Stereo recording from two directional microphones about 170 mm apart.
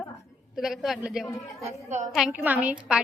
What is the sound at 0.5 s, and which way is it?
A woman's voice, centre (ahead or behind).